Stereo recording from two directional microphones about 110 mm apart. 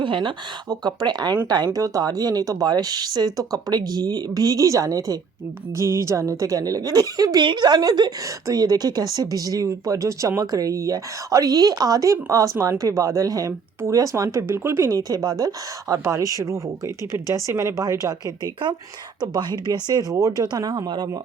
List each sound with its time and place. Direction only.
0.0 s a woman's voice: 50° right (ahead or behind)